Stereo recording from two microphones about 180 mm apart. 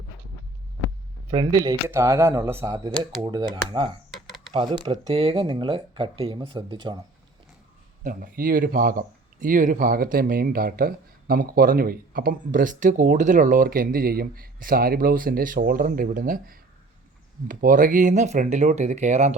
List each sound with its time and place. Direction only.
1.3 s speech: 25° right (ahead or behind)
8.0 s speech: 50° right (ahead or behind)